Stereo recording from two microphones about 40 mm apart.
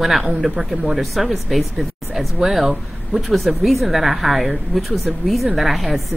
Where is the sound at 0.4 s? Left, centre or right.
Centre.